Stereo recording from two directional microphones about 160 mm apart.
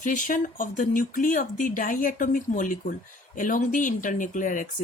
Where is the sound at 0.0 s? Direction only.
55° left (ahead or behind).